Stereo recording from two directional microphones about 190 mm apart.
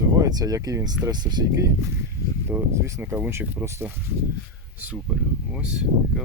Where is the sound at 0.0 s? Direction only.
20° right (ahead or behind).